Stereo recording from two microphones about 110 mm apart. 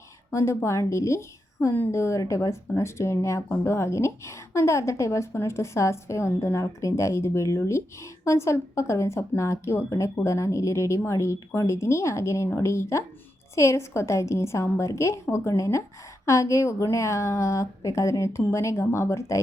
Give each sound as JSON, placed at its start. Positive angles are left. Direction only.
{"t": 0.3, "sound": "speech", "side_deg": 25}